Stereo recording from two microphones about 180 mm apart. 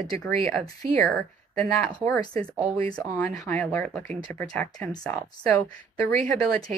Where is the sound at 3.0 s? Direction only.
10° left (ahead or behind).